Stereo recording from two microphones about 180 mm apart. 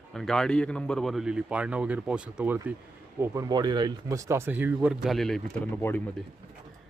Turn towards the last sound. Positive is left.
turn(degrees=10)  # may be behind; listen again after turning